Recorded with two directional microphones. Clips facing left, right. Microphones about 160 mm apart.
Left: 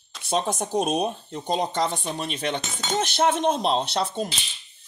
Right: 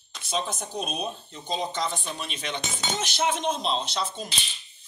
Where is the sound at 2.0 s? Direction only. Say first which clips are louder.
Left 6 dB; 40° left (ahead or behind).